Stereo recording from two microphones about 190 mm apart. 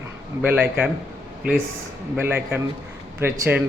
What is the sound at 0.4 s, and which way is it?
Speech, 10° right (ahead or behind).